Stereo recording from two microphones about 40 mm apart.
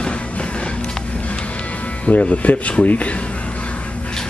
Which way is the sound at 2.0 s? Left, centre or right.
Left.